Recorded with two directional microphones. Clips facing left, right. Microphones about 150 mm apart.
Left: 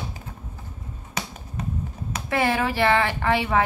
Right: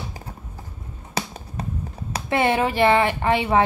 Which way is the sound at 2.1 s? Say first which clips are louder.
Right 3 dB; 25° right (ahead or behind).